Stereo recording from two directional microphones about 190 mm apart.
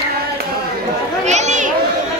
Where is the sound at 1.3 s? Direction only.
40° right (ahead or behind).